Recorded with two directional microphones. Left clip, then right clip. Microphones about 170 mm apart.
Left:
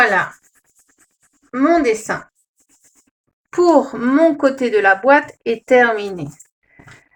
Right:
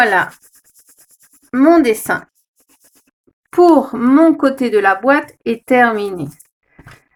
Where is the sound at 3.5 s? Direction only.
75° right (ahead or behind).